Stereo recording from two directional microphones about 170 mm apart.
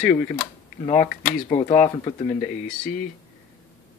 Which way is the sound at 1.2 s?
30° left (ahead or behind).